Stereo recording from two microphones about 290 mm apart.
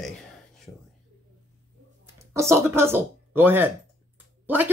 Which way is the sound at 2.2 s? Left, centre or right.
Centre.